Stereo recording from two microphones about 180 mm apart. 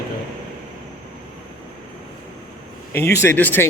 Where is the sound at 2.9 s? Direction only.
15° left (ahead or behind).